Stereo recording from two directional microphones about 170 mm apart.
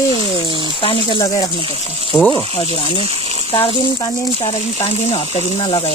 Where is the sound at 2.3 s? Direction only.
30° left (ahead or behind).